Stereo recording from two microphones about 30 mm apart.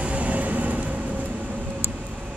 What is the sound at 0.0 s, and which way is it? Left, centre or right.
Vehicle, right.